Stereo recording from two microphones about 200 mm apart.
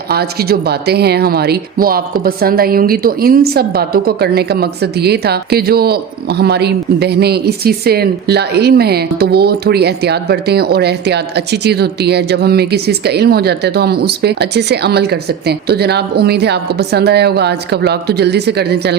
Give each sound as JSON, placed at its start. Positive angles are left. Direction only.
{"t": 0.1, "sound": "speech", "side_deg": -50}